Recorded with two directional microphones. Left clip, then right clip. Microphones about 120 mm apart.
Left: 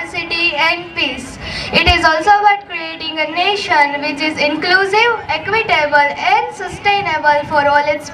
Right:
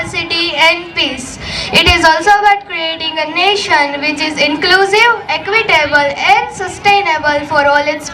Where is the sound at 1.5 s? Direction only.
20° right (ahead or behind).